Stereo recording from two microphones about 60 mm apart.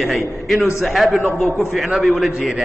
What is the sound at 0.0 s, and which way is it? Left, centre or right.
A man's voice, centre.